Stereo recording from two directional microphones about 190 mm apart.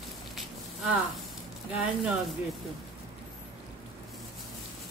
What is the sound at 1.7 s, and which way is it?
Speech, 5° right (ahead or behind).